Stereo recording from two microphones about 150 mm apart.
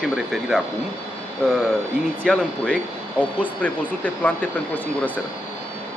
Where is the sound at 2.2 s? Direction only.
5° left (ahead or behind).